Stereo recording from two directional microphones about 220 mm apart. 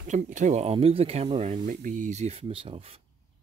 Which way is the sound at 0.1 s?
35° right (ahead or behind).